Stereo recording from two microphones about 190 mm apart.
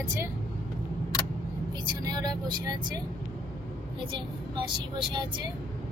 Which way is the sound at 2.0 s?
20° right (ahead or behind).